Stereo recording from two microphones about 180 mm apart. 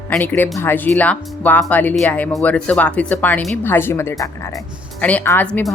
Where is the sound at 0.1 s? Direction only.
10° left (ahead or behind).